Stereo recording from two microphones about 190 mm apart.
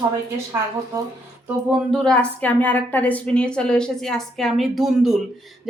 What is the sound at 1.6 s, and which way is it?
A woman's voice, centre (ahead or behind).